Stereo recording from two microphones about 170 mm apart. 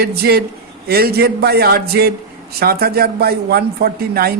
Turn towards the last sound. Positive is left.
turn(degrees=-65)  # may be behind; listen again after turning